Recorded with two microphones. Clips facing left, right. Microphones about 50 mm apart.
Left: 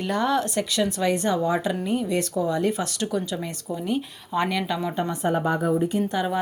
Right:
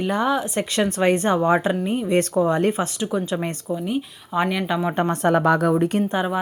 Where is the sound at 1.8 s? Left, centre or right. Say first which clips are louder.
Right 2 dB; right.